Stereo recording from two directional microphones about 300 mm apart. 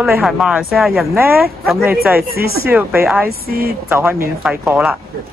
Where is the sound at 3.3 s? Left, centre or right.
Right.